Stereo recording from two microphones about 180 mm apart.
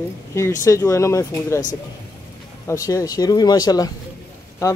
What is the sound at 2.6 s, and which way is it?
Speech, 20° left (ahead or behind).